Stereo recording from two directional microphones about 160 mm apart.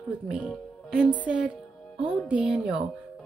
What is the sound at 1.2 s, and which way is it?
A woman's voice, 5° right (ahead or behind).